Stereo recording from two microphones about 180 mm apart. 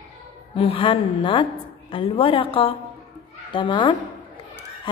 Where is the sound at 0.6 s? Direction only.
30° left (ahead or behind).